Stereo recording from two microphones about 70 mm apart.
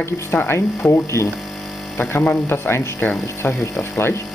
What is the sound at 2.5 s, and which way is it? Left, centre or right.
Speech, left.